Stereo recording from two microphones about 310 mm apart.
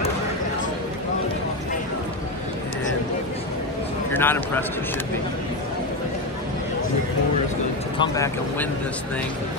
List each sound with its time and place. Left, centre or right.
4.1 s speech: centre
8.0 s speech: centre